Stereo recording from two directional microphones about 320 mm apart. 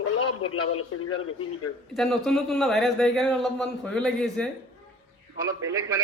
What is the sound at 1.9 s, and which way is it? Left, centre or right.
Speech, centre.